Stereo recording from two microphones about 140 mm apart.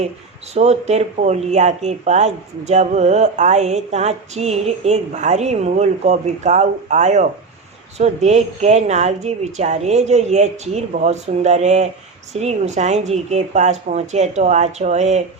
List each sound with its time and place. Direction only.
0.5 s speech: 50° right (ahead or behind)